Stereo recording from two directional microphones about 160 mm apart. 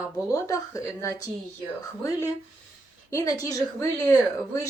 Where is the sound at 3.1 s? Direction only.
20° left (ahead or behind).